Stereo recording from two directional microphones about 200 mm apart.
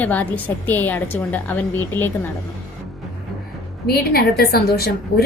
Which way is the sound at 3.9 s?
50° left (ahead or behind).